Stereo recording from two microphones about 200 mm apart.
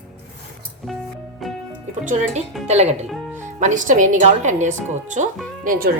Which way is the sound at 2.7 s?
30° right (ahead or behind).